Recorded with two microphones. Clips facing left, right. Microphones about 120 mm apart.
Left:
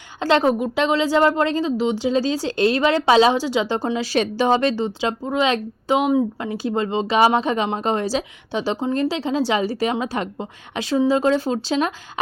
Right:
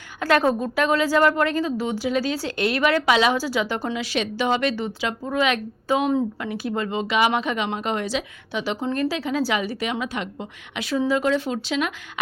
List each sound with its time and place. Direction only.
0.2 s a woman's voice: 25° left (ahead or behind)
8.8 s a woman's voice: 20° left (ahead or behind)